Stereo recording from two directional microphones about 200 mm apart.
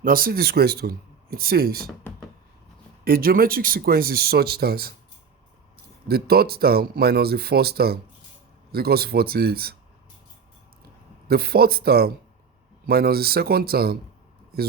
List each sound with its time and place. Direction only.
0.0 s speech: 45° right (ahead or behind)
3.0 s speech: 45° right (ahead or behind)
6.1 s speech: 50° right (ahead or behind)
11.3 s speech: 50° right (ahead or behind)